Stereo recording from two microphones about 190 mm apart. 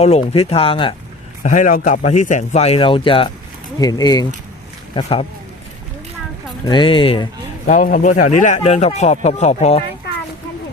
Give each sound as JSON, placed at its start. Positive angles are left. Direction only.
{"t": 0.0, "sound": "speech", "side_deg": 35}
{"t": 1.5, "sound": "a man's voice", "side_deg": 45}
{"t": 4.9, "sound": "a man's voice", "side_deg": 30}
{"t": 6.7, "sound": "speech", "side_deg": 25}
{"t": 7.7, "sound": "a man's voice", "side_deg": 45}